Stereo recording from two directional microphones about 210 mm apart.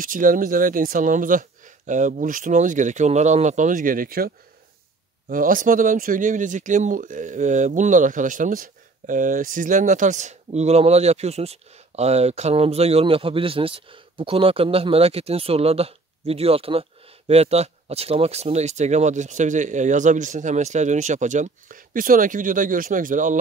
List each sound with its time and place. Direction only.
0.0 s speech: 40° right (ahead or behind)
5.3 s speech: 40° right (ahead or behind)